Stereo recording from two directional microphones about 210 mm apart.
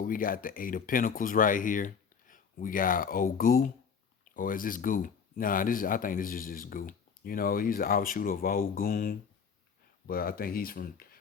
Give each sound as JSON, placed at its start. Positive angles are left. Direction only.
{"t": 0.0, "sound": "speech", "side_deg": 40}